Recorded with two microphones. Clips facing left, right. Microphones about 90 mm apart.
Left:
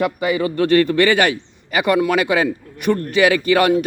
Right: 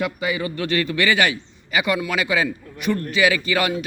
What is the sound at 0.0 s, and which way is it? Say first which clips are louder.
A man's voice: left 5 dB; 45° left (ahead or behind).